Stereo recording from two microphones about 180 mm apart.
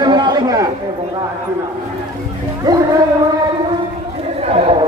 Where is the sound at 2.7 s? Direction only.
20° right (ahead or behind).